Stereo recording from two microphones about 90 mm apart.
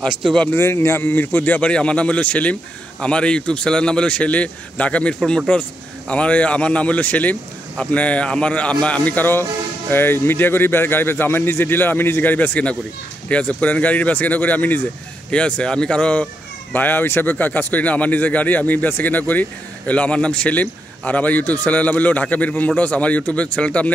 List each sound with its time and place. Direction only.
0.0 s speech: 10° left (ahead or behind)
0.5 s speech: 30° left (ahead or behind)